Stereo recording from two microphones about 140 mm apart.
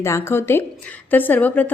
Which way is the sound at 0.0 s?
20° left (ahead or behind).